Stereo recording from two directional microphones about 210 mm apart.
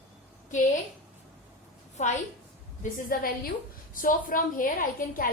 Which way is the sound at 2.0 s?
35° left (ahead or behind).